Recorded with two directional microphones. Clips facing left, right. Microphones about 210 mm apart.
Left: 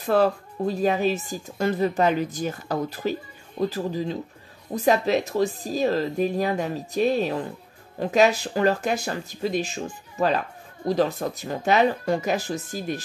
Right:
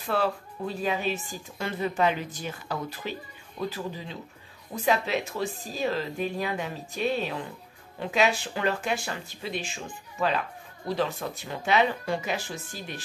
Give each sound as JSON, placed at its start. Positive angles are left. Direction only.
{"t": 0.0, "sound": "speech", "side_deg": 40}